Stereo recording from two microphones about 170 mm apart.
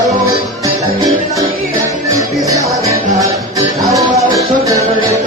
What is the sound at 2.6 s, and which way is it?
Music, 20° right (ahead or behind).